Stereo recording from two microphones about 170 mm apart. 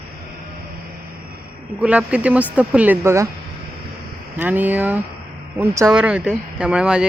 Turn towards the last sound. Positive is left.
turn(degrees=-5)  # may be behind; listen again after turning